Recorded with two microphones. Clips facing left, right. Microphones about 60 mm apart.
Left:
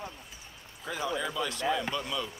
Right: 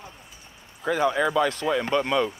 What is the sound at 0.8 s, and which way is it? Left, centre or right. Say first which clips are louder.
Speech: right 10 dB; right.